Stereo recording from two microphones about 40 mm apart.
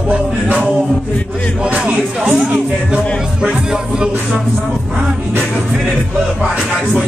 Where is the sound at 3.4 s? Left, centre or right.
Centre.